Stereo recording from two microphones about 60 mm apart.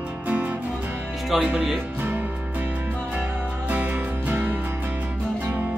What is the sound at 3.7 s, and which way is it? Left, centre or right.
Music, right.